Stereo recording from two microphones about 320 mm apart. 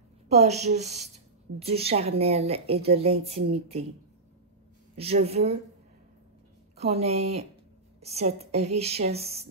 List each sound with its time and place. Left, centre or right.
0.3 s a woman's voice: right
4.9 s a woman's voice: centre
6.8 s a woman's voice: centre